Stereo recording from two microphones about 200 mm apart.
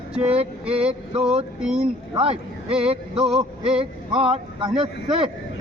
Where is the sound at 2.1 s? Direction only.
30° right (ahead or behind).